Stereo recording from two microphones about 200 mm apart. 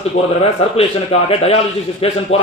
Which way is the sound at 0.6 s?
30° left (ahead or behind).